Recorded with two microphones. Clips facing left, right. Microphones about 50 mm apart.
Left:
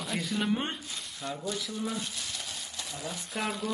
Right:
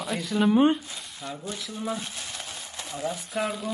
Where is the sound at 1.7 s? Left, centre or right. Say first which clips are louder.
Right 3 dB; right.